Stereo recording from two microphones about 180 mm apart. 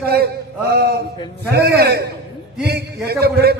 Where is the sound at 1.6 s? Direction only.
60° right (ahead or behind).